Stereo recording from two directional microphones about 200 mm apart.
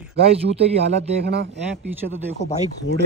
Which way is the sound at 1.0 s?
60° right (ahead or behind).